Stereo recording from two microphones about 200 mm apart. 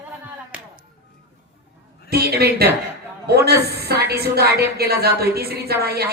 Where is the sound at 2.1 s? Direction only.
50° right (ahead or behind).